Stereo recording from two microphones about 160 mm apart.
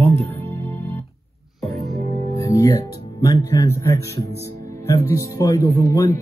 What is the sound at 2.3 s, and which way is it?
Music, 20° left (ahead or behind).